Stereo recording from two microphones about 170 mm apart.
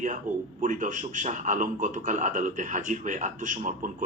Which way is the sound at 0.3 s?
50° right (ahead or behind).